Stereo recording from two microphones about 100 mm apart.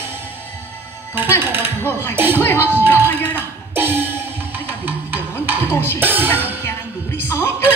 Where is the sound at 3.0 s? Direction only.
20° left (ahead or behind).